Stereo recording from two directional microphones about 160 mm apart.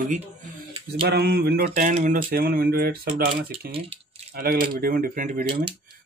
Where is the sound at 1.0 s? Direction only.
85° right.